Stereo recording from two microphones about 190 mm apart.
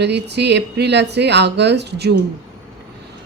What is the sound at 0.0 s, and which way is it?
A woman's voice, 65° right (ahead or behind).